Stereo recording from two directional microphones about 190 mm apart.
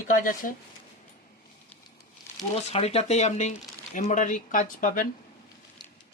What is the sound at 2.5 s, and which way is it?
Speech, 35° left (ahead or behind).